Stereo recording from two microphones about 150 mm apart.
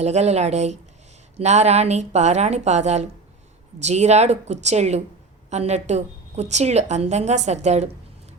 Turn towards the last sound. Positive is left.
turn(degrees=-50)  # may be behind; listen again after turning